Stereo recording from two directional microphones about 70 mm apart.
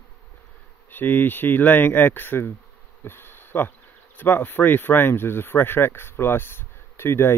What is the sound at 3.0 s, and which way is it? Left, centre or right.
Bee, left.